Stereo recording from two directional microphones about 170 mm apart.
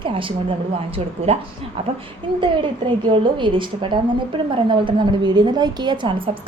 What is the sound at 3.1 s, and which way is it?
A woman's voice, 30° right (ahead or behind).